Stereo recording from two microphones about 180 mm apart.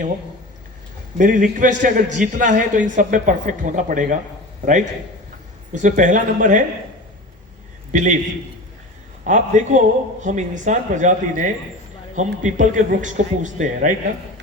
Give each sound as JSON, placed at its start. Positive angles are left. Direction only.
{"t": 1.2, "sound": "speech", "side_deg": -45}
{"t": 5.7, "sound": "speech", "side_deg": -45}
{"t": 7.9, "sound": "speech", "side_deg": -45}
{"t": 9.2, "sound": "speech", "side_deg": -40}